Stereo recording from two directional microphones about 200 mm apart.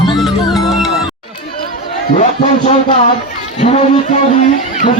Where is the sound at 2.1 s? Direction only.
35° left (ahead or behind).